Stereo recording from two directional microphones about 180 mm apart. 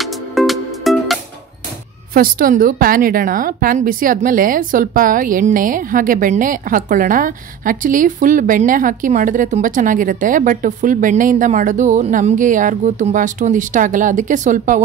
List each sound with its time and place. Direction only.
0.0 s music: centre (ahead or behind)
2.1 s a woman's voice: 50° right (ahead or behind)